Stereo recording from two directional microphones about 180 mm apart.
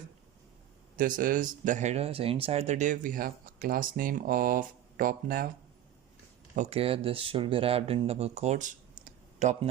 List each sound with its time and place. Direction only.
0.9 s speech: 50° right (ahead or behind)
6.6 s speech: 35° right (ahead or behind)